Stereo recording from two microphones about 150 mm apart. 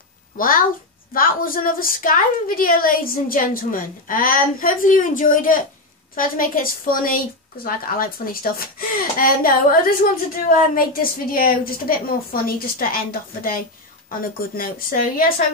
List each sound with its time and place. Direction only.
0.4 s a woman's voice: 70° left (ahead or behind)
14.6 s a woman's voice: 70° left (ahead or behind)